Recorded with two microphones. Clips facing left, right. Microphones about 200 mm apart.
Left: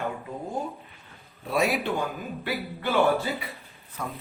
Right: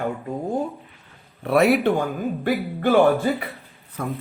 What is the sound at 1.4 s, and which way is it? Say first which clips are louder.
A man's voice: right 8 dB; 60° right (ahead or behind).